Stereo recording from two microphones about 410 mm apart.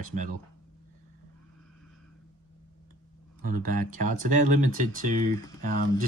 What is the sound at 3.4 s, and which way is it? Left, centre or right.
Speech, centre.